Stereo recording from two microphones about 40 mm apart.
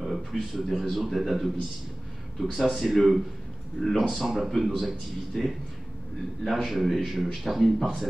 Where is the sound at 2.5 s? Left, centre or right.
Centre.